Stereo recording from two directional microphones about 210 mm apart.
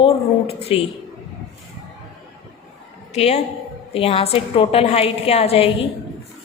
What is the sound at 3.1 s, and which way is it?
A woman's voice, 30° left (ahead or behind).